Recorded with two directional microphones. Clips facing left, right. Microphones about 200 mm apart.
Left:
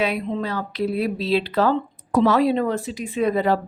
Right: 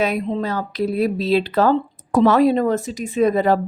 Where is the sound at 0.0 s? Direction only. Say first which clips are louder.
Right 3 dB; 45° right (ahead or behind).